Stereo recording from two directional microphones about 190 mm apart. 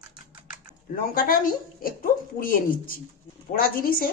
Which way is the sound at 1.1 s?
50° left (ahead or behind).